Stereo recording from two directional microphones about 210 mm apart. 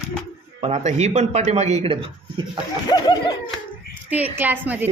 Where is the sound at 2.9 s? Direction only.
20° left (ahead or behind).